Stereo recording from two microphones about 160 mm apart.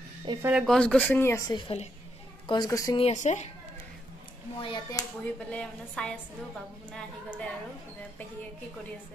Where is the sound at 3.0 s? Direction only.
45° left (ahead or behind).